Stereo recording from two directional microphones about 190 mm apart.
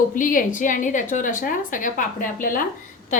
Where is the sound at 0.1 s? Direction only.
45° left (ahead or behind).